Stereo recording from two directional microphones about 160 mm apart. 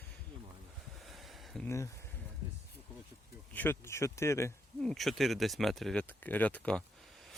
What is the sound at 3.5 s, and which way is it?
Speech, 15° left (ahead or behind).